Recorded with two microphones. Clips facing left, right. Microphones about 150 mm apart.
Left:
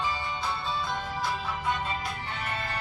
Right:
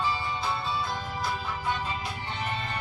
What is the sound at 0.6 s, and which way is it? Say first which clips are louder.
Music: even; centre (ahead or behind).